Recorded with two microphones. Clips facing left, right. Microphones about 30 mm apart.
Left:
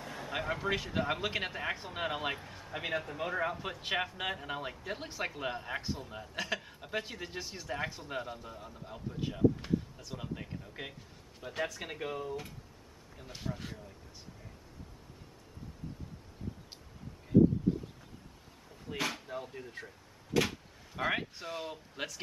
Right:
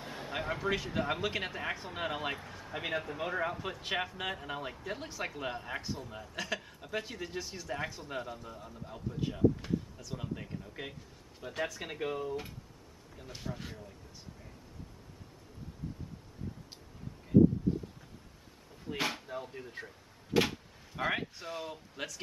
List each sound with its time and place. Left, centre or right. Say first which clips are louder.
0.0 s a sound: even; centre
0.3 s speech: even; centre
18.9 s speech: right 1 dB; centre
19.2 s speech: even; centre
20.3 s speech: right 1 dB; right
20.9 s speech: even; centre